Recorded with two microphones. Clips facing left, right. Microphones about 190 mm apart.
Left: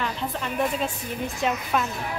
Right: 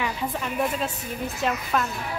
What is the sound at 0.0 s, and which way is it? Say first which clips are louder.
A woman's voice: right 1 dB; 5° right (ahead or behind).